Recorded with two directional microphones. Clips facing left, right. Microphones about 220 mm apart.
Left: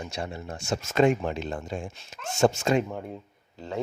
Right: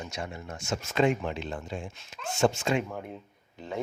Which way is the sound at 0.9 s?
45° left (ahead or behind).